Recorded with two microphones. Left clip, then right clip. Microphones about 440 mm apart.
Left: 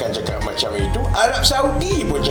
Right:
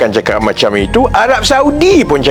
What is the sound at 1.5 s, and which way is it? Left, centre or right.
Speech, left.